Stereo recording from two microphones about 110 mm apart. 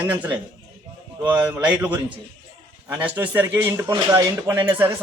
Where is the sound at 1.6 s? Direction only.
15° right (ahead or behind).